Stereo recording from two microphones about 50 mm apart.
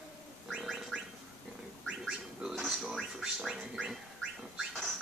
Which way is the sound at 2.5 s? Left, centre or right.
Centre.